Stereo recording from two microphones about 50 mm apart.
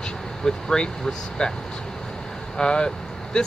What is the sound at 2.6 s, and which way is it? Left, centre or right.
Speech, centre.